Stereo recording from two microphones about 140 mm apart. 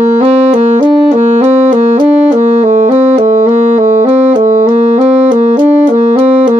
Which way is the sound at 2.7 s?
60° right (ahead or behind).